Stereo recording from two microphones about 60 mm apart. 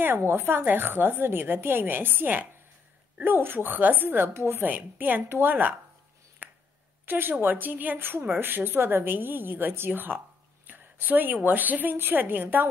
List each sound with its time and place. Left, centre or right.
0.0 s a woman's voice: right
4.6 s a woman's voice: right
6.4 s finger snapping: right
7.1 s a woman's voice: right